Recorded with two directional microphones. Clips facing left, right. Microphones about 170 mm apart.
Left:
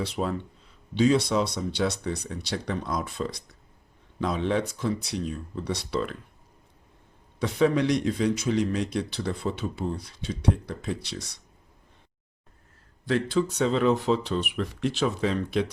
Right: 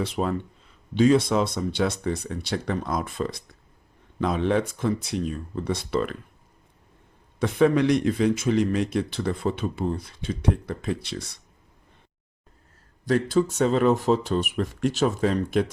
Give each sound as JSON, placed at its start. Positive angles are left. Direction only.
{"t": 0.0, "sound": "speech", "side_deg": -50}
{"t": 7.3, "sound": "speech", "side_deg": -55}
{"t": 13.1, "sound": "speech", "side_deg": -40}